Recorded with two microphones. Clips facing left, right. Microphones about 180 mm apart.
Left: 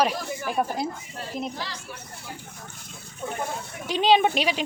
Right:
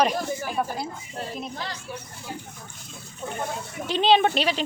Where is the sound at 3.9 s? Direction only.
10° left (ahead or behind).